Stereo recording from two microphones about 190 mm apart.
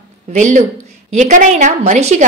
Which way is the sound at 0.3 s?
40° right (ahead or behind).